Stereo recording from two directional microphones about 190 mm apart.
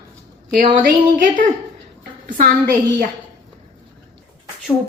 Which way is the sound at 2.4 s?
45° right (ahead or behind).